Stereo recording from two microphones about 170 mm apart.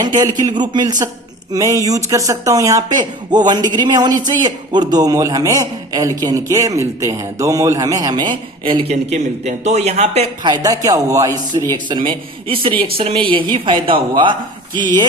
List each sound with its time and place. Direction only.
0.0 s a man's voice: 25° right (ahead or behind)
10.4 s a man's voice: 25° right (ahead or behind)